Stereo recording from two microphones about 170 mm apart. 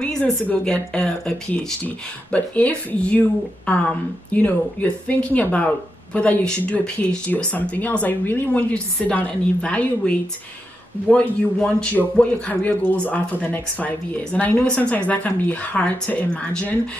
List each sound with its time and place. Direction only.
0.0 s speech: 5° left (ahead or behind)